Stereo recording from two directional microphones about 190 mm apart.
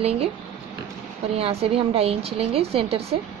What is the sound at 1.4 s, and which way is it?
Speech, 30° right (ahead or behind).